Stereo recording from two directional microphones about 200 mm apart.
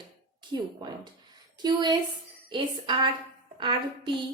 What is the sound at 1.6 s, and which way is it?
A woman's voice, 20° right (ahead or behind).